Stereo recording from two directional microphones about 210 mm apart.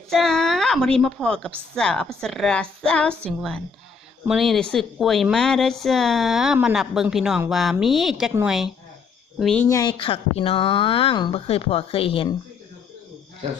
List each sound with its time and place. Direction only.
0.1 s a woman's voice: centre (ahead or behind)
8.3 s a woman's voice: 10° right (ahead or behind)
9.4 s speech: 5° left (ahead or behind)
9.6 s speech: 20° left (ahead or behind)